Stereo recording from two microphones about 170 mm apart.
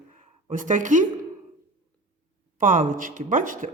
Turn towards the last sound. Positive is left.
turn(degrees=-50)  # may be behind; listen again after turning